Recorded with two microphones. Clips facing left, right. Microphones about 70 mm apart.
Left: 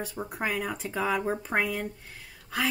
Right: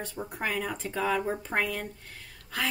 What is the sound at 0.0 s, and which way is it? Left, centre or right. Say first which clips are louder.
A woman's voice: left 1 dB; centre.